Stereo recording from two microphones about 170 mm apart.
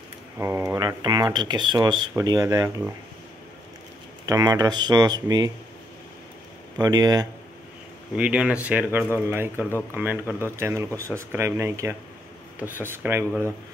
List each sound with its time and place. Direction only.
0.4 s speech: 15° right (ahead or behind)
4.3 s speech: 20° right (ahead or behind)
6.8 s speech: 20° right (ahead or behind)
8.2 s speech: 5° right (ahead or behind)